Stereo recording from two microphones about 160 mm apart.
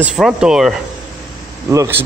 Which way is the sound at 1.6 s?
15° right (ahead or behind).